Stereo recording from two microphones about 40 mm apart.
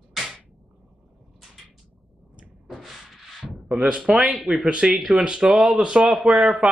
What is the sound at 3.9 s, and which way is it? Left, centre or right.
Speech, centre.